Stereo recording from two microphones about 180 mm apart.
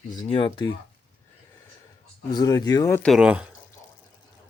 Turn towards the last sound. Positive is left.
turn(degrees=-5)  # may be behind; listen again after turning